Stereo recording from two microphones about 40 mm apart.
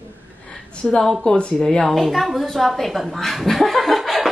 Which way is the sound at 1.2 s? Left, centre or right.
Left.